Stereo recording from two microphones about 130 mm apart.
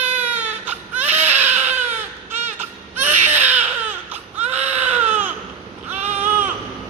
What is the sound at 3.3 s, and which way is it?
Baby cry, 15° right (ahead or behind).